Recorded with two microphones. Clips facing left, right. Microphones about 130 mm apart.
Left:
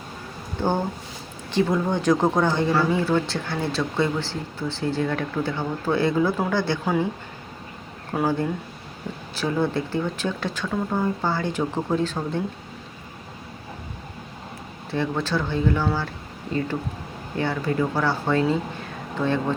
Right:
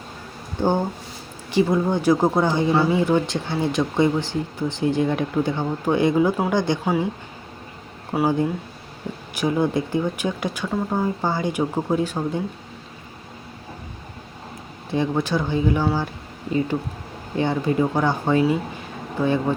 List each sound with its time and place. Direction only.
0.6 s speech: 15° right (ahead or behind)
8.1 s speech: 10° right (ahead or behind)
14.8 s speech: 15° right (ahead or behind)